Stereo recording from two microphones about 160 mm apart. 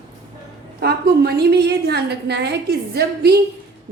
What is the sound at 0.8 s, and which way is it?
A woman's voice, 80° right.